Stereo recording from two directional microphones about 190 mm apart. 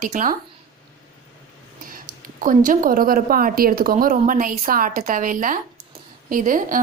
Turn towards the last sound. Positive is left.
turn(degrees=-45)  # may be behind; listen again after turning